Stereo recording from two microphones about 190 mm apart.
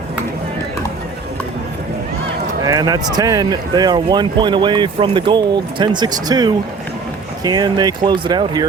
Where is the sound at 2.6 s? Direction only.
20° right (ahead or behind).